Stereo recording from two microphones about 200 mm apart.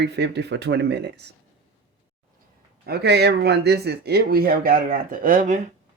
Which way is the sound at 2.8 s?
55° right (ahead or behind).